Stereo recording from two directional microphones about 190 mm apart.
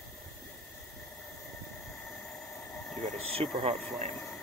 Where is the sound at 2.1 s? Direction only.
5° left (ahead or behind).